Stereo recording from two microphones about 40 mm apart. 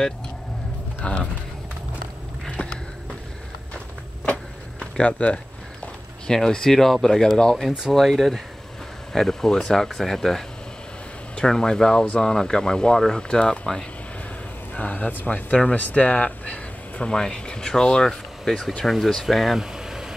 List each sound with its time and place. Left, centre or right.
1.0 s speech: left
2.5 s a sound: left
4.7 s speech: left
6.2 s speech: centre
7.9 s speech: centre
14.7 s speech: left
17.1 s speech: centre
19.6 s vehicle: centre